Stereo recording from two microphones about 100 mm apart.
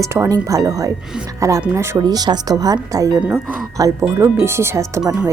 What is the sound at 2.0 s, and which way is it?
Speech, 40° right (ahead or behind).